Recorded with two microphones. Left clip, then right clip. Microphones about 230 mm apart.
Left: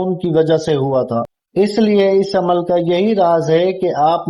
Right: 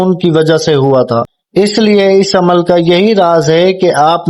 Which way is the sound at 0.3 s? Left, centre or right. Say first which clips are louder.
Right 4 dB; right.